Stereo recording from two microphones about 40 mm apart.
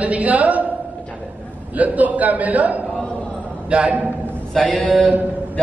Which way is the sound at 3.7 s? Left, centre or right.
Right.